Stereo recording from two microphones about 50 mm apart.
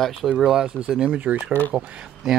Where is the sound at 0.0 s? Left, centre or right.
Centre.